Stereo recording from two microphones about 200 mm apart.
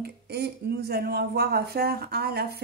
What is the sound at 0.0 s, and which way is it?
Speech, 55° right (ahead or behind).